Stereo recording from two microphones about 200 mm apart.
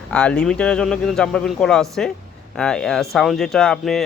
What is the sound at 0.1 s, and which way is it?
Speech, 5° left (ahead or behind).